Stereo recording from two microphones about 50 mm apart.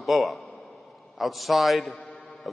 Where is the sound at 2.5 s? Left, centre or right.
Centre.